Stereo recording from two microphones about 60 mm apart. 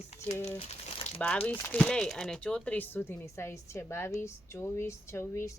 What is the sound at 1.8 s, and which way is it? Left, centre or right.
Speech, centre.